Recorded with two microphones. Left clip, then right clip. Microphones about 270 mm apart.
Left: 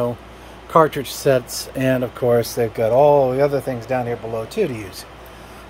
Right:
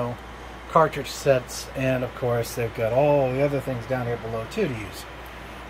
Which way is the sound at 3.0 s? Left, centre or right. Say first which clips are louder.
Left 7 dB; left.